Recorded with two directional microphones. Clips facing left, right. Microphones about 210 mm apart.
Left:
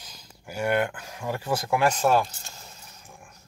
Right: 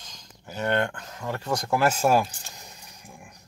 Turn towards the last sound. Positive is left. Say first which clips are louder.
# right 1 dB
turn(degrees=-15)  # may be behind; listen again after turning